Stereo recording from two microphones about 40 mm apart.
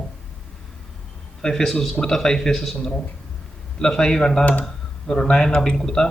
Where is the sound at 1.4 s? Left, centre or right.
Centre.